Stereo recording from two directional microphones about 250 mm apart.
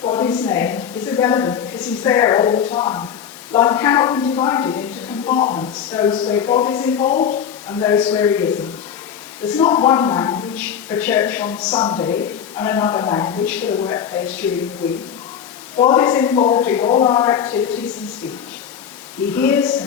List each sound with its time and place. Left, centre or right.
0.0 s a woman's voice: centre
7.1 s speech: left
7.7 s a woman's voice: centre
9.6 s a woman's voice: centre
15.8 s a woman's voice: centre
19.4 s a woman's voice: centre